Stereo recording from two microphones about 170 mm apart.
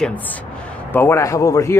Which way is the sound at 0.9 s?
15° left (ahead or behind).